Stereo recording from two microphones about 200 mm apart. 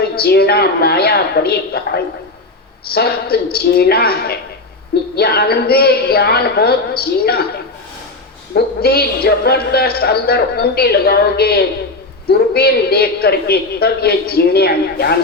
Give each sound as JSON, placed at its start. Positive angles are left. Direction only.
{"t": 0.2, "sound": "speech", "side_deg": 50}